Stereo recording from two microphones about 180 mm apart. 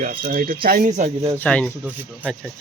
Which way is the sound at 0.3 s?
50° right (ahead or behind).